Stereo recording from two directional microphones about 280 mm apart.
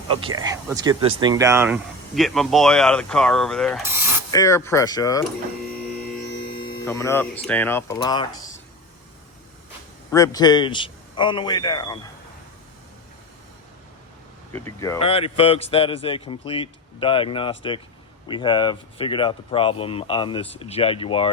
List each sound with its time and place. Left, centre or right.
0.2 s speech: centre
6.2 s hum: left
6.8 s speech: centre
10.1 s speech: centre
14.5 s speech: centre